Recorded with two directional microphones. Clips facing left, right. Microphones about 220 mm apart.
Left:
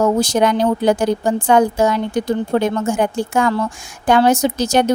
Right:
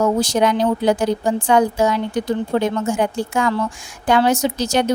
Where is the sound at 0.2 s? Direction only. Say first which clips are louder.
Left 2 dB; 50° left (ahead or behind).